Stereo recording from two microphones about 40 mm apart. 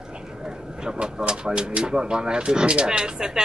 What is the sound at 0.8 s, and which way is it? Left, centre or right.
Speech, right.